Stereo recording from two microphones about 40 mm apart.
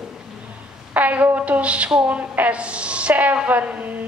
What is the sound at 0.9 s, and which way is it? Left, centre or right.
A woman's voice, right.